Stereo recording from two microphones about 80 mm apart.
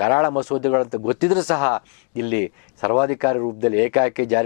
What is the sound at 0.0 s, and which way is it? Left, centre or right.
Speech, centre.